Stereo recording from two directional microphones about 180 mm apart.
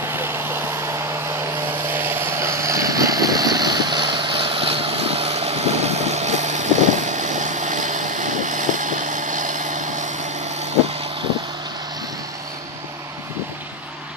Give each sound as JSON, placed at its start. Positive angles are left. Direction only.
{"t": 0.1, "sound": "vehicle", "side_deg": -10}